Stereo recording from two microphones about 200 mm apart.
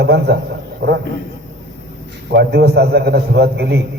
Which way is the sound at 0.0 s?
55° right (ahead or behind).